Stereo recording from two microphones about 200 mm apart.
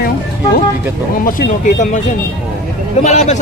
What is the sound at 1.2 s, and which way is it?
Speech, 40° left (ahead or behind).